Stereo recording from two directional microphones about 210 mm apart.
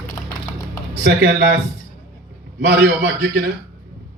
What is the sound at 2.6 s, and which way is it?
Speech, 55° right (ahead or behind).